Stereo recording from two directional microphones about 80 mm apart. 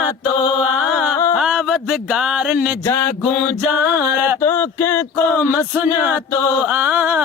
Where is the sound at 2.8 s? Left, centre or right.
Left.